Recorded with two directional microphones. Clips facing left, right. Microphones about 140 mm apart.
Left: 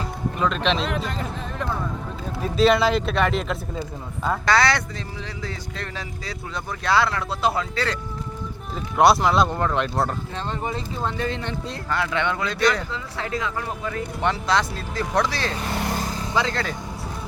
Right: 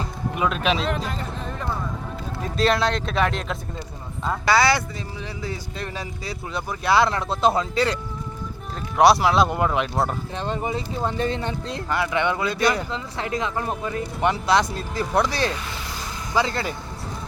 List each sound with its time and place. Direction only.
0.3 s speech: 5° right (ahead or behind)
2.6 s speech: centre (ahead or behind)
7.1 s speech: 25° right (ahead or behind)
8.7 s speech: centre (ahead or behind)
10.3 s speech: 15° right (ahead or behind)
12.9 s speech: 20° right (ahead or behind)
14.2 s speech: 10° right (ahead or behind)
15.7 s vehicle: 55° left (ahead or behind)
16.3 s speech: 10° right (ahead or behind)